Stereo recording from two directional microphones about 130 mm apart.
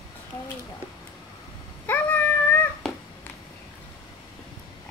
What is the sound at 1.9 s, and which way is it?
Dog, 15° left (ahead or behind).